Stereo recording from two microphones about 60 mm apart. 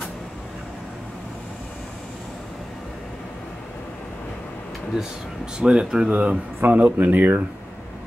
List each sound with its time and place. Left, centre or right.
5.6 s speech: centre; by 7.4 s right